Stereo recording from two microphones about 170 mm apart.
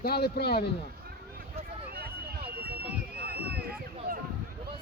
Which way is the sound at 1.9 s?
65° right (ahead or behind).